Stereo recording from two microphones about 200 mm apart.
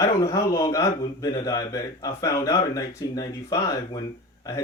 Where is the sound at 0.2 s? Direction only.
15° left (ahead or behind).